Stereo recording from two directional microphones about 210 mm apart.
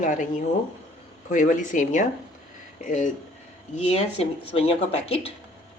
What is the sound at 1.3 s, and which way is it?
Speech, 40° left (ahead or behind).